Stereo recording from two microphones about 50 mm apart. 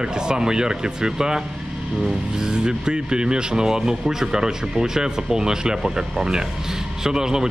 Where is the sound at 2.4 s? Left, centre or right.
Centre.